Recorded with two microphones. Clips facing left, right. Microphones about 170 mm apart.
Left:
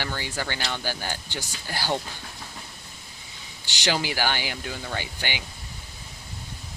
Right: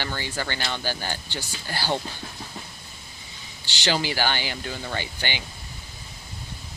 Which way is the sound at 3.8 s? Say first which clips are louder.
Right 1 dB; 10° left (ahead or behind).